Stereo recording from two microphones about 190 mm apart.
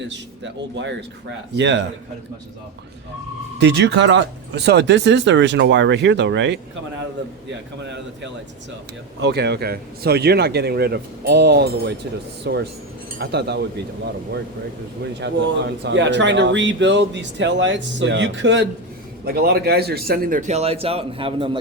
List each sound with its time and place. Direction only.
1.5 s speech: 70° right (ahead or behind)
3.6 s speech: 65° right (ahead or behind)
9.2 s speech: 60° right (ahead or behind)
15.2 s speech: 70° right (ahead or behind)
19.2 s a man's voice: 55° right (ahead or behind); by 21.6 s 25° right (ahead or behind)